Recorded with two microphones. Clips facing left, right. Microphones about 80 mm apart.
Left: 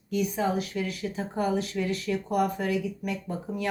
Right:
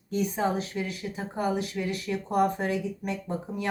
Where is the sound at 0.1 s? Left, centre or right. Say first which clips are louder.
Even; right.